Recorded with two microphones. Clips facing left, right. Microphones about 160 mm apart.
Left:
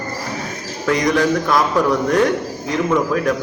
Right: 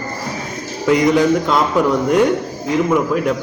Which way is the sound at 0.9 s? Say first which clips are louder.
Right 3 dB; 20° right (ahead or behind).